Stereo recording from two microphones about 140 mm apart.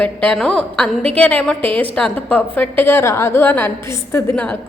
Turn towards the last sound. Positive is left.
turn(degrees=10)  # may be behind; listen again after turning